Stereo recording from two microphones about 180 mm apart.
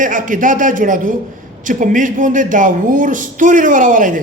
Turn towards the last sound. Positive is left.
turn(degrees=-45)  # may be behind; listen again after turning